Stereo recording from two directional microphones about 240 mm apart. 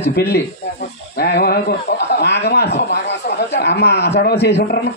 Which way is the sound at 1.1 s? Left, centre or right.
Left.